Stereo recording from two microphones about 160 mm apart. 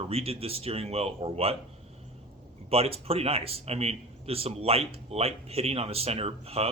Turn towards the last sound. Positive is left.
turn(degrees=-40)  # may be behind; listen again after turning